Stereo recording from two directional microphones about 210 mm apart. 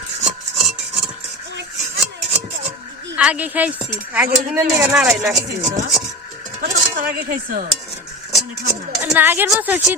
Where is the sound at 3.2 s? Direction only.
5° right (ahead or behind).